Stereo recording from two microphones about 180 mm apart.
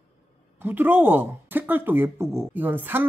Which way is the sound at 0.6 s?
10° right (ahead or behind).